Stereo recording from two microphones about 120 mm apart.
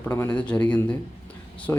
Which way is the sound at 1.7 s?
25° left (ahead or behind).